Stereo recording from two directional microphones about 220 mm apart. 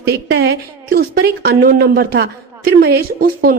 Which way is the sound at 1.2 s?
45° right (ahead or behind).